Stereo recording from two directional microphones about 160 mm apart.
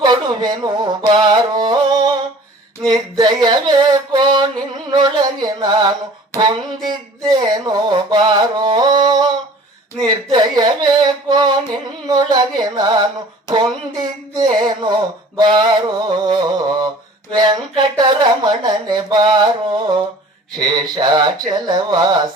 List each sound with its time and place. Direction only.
0.0 s music: 25° right (ahead or behind)
2.8 s a sound: 25° right (ahead or behind)
12.0 s speech: 25° right (ahead or behind)
20.6 s speech: 25° right (ahead or behind)